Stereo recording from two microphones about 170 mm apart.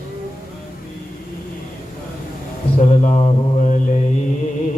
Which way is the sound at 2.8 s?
45° left (ahead or behind).